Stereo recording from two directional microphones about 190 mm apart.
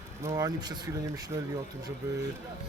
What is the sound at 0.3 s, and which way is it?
Speech, 20° right (ahead or behind).